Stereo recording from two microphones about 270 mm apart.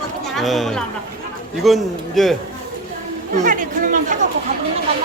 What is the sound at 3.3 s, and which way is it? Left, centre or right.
Speech, right.